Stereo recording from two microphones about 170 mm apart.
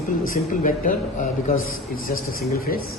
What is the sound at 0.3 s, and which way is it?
A man's voice, 55° left (ahead or behind).